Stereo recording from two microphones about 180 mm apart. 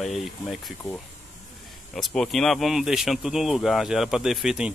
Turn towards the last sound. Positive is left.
turn(degrees=-5)  # may be behind; listen again after turning